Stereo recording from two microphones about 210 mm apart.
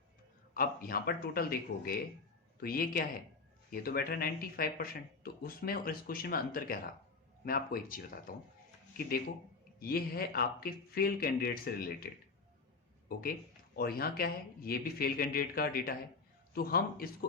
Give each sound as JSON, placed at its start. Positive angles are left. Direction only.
{"t": 0.5, "sound": "speech", "side_deg": 45}
{"t": 9.8, "sound": "speech", "side_deg": 45}
{"t": 13.7, "sound": "speech", "side_deg": 45}